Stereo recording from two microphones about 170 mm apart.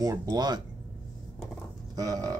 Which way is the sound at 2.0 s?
20° right (ahead or behind).